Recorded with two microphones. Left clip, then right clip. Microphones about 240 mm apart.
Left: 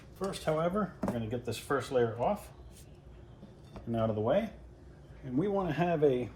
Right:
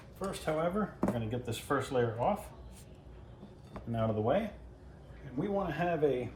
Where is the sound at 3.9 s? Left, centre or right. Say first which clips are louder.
Left 1 dB; centre.